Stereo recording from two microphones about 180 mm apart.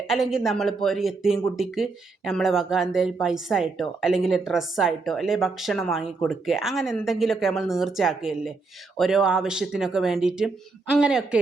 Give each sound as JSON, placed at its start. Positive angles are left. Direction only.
{"t": 0.1, "sound": "a woman's voice", "side_deg": 0}